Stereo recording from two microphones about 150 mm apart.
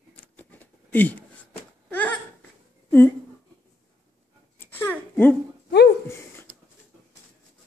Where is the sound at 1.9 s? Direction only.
10° left (ahead or behind).